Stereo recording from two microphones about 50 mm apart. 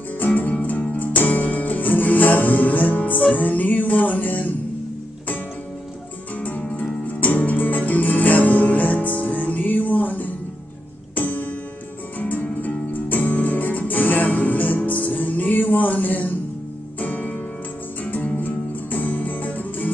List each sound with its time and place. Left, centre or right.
0.2 s music: left
7.1 s music: left